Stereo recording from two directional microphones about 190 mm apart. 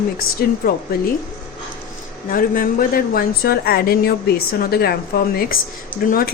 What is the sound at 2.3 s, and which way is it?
A woman's voice, 50° left (ahead or behind).